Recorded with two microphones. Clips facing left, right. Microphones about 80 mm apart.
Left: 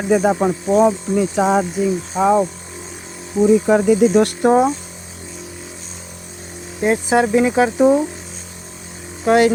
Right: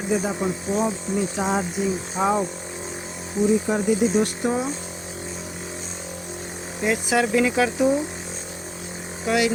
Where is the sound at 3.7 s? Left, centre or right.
Left.